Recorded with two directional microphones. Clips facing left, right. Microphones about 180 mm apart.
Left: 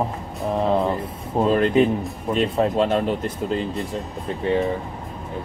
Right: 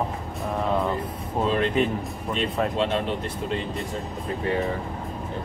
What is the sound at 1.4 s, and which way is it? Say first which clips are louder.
Speech: left 5 dB; 30° left (ahead or behind).